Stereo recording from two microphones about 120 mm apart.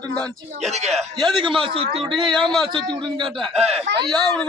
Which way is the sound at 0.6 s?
70° right (ahead or behind).